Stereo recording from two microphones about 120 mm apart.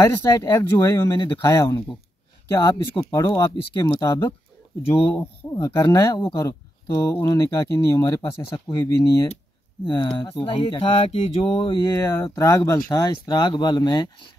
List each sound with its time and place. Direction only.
0.0 s speech: 20° left (ahead or behind)
3.1 s speech: 25° left (ahead or behind)
3.8 s speech: 35° left (ahead or behind)
4.8 s speech: 50° left (ahead or behind)
5.5 s speech: 25° left (ahead or behind)
9.8 s speech: 40° left (ahead or behind)
11.8 s speech: 20° left (ahead or behind)